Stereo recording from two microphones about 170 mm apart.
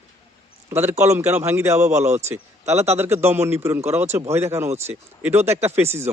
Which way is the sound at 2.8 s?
15° right (ahead or behind).